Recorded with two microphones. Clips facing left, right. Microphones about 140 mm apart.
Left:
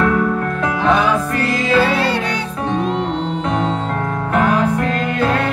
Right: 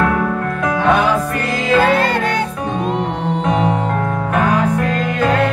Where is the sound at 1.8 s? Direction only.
50° right (ahead or behind).